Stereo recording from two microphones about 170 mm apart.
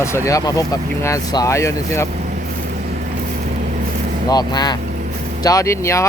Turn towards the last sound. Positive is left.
turn(degrees=15)  # may be behind; listen again after turning